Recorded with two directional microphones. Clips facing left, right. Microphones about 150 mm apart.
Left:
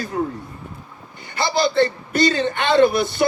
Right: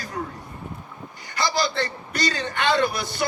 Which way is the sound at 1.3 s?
25° left (ahead or behind).